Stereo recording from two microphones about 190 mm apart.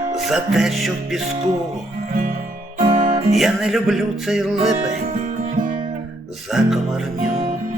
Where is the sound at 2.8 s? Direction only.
30° right (ahead or behind).